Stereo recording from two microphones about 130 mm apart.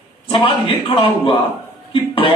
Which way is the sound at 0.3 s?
40° left (ahead or behind).